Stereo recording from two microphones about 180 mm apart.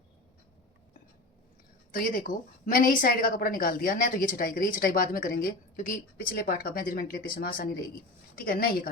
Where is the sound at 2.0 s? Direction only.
50° left (ahead or behind).